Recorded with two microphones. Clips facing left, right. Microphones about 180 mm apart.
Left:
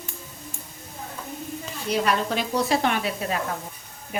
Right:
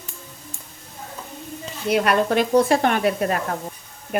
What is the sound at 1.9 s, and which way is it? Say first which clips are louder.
Speech: right 5 dB; 60° right (ahead or behind).